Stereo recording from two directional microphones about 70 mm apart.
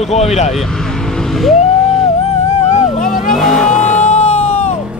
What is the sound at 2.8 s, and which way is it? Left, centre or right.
Vehicle, centre.